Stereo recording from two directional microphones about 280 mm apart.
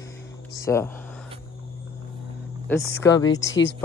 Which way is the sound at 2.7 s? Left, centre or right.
Centre.